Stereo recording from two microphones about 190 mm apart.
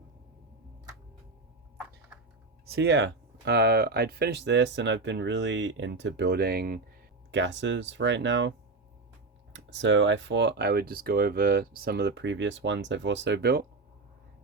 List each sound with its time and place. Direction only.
2.6 s speech: 60° right (ahead or behind)
7.3 s speech: 70° right (ahead or behind)